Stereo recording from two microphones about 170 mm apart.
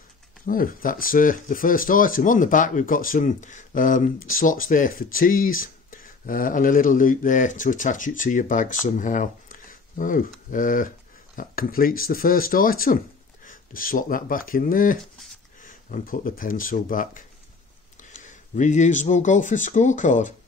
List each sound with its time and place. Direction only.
0.5 s speech: 55° left (ahead or behind)